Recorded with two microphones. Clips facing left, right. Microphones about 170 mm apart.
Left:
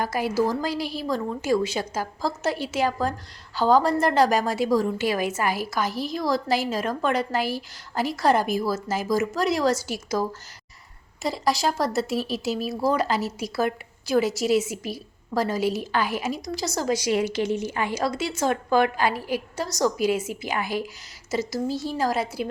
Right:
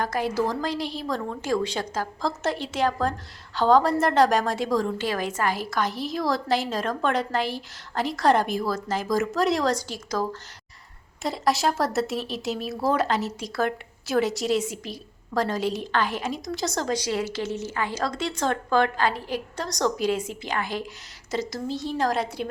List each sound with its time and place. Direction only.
0.0 s a woman's voice: 5° left (ahead or behind)